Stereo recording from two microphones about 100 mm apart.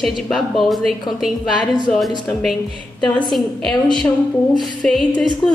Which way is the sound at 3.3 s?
5° left (ahead or behind).